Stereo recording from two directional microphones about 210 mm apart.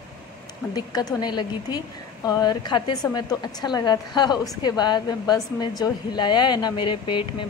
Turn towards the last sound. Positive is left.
turn(degrees=25)  # may be behind; listen again after turning